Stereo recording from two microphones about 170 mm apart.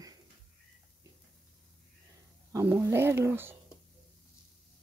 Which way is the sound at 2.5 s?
15° right (ahead or behind).